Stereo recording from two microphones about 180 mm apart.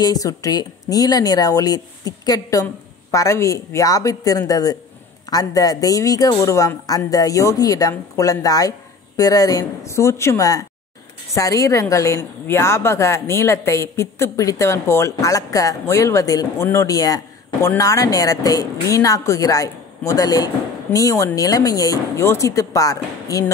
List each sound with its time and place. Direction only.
0.0 s a woman's voice: 20° left (ahead or behind)